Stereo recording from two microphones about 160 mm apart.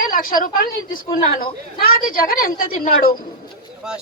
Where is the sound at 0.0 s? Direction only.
60° left (ahead or behind).